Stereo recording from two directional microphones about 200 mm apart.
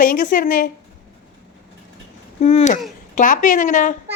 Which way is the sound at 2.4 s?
35° left (ahead or behind).